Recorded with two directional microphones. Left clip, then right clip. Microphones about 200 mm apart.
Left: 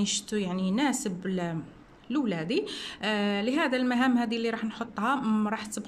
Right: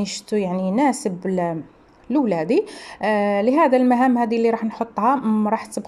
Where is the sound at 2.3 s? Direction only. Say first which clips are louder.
Right 10 dB; 15° left (ahead or behind).